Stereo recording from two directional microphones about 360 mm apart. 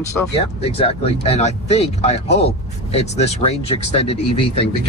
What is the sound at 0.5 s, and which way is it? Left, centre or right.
Speech, centre.